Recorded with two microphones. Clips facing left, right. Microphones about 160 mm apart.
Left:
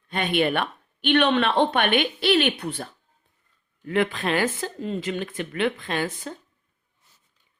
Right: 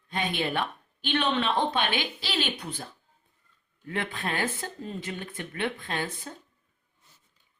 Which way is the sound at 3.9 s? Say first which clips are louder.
Left 9 dB; 90° left.